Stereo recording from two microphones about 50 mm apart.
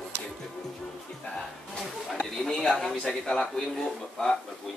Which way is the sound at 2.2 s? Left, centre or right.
Centre.